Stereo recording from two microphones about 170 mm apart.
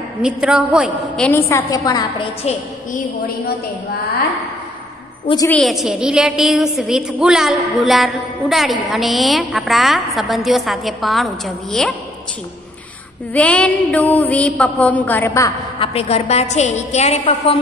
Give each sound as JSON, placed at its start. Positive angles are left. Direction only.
{"t": 0.2, "sound": "a woman's voice", "side_deg": -5}
{"t": 5.5, "sound": "a woman's voice", "side_deg": 0}
{"t": 13.3, "sound": "mantra", "side_deg": 5}
{"t": 15.8, "sound": "a woman's voice", "side_deg": 35}